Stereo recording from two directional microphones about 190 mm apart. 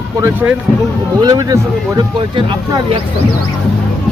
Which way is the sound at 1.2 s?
20° right (ahead or behind).